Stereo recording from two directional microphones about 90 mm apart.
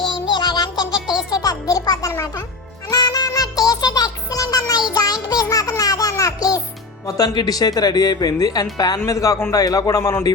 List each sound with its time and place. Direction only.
0.1 s music: 55° left (ahead or behind)
0.9 s music: 5° right (ahead or behind)
1.3 s music: 45° left (ahead or behind)
7.1 s speech: 45° left (ahead or behind)